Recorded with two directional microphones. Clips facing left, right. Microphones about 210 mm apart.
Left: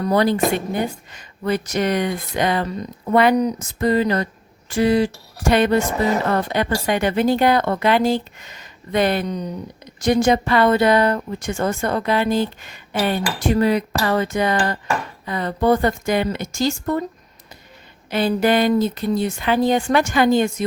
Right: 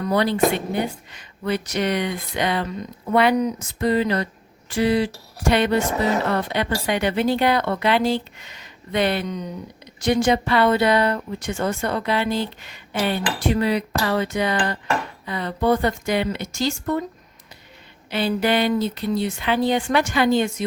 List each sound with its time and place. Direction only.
0.0 s speech: 45° left (ahead or behind)
18.1 s speech: 45° left (ahead or behind)